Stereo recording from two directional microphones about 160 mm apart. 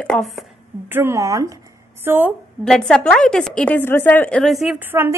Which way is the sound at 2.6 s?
5° left (ahead or behind).